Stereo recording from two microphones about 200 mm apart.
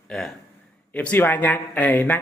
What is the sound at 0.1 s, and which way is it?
A man's voice, centre (ahead or behind).